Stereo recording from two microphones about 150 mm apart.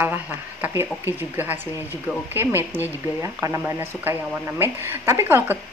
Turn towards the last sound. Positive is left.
turn(degrees=-15)  # may be behind; listen again after turning